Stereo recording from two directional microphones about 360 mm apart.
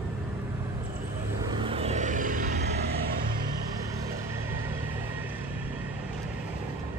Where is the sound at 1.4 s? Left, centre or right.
Centre.